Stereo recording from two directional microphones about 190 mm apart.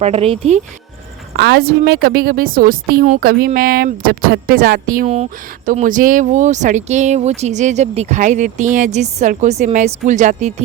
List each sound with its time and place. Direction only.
0.0 s speech: 35° right (ahead or behind)
1.4 s a woman's voice: 55° right (ahead or behind); by 10.5 s 40° right (ahead or behind)